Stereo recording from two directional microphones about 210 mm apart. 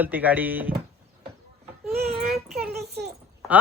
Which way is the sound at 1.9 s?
45° right (ahead or behind).